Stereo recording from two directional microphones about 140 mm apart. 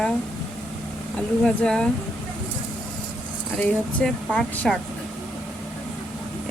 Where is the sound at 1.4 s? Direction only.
5° left (ahead or behind).